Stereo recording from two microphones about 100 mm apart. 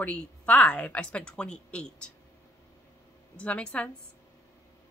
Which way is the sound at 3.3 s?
10° left (ahead or behind).